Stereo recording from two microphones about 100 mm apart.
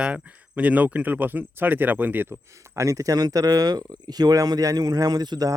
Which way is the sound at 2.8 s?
35° right (ahead or behind).